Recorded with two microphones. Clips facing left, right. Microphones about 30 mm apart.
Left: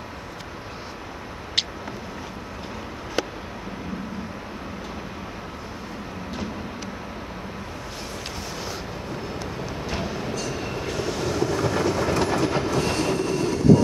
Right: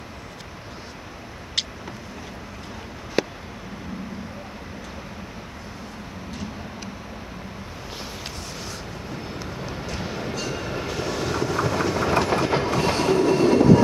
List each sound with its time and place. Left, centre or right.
10.0 s a sound: centre
10.7 s vehicle: centre
12.3 s train: centre
12.9 s train: right